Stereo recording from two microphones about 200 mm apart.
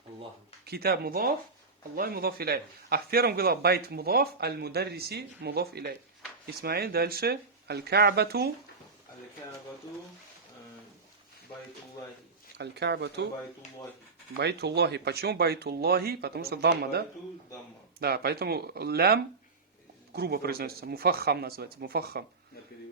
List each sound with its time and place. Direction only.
0.6 s a man's voice: 50° right (ahead or behind)
12.5 s speech: 55° right (ahead or behind)
14.3 s a man's voice: 55° right (ahead or behind)